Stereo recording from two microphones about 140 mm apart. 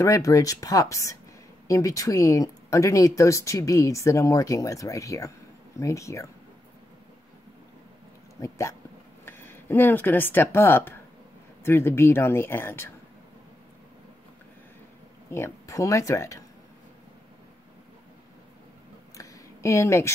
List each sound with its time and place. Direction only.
0.0 s speech: 25° left (ahead or behind)
8.4 s speech: 20° left (ahead or behind)
15.3 s speech: 20° left (ahead or behind)
19.1 s a sound: 20° left (ahead or behind)